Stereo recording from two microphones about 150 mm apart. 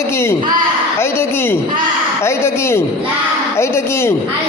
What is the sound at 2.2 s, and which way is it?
A man's voice, 15° left (ahead or behind).